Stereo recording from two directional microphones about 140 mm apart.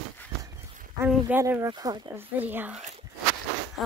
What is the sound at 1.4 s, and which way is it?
Speech, 20° right (ahead or behind).